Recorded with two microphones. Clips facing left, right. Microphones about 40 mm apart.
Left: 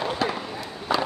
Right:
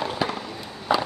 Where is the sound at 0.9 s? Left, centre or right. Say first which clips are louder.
Right 2 dB; centre.